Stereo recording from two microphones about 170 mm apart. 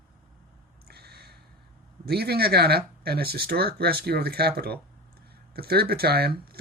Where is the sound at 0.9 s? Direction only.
70° right (ahead or behind).